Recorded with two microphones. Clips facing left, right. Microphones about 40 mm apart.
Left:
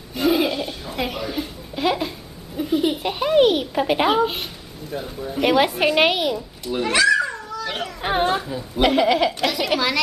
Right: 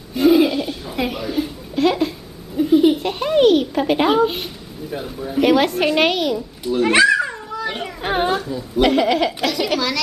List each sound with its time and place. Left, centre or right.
0.1 s speech: centre
4.9 s speech: centre
5.4 s a woman's voice: centre
6.9 s a child's voice: right
7.2 s children playing: centre
8.3 s a woman's voice: centre